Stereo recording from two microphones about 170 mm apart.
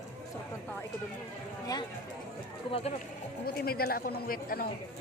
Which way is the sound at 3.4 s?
65° left (ahead or behind).